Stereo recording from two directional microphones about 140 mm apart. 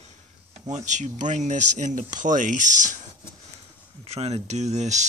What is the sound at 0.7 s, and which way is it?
Speech, 60° right (ahead or behind).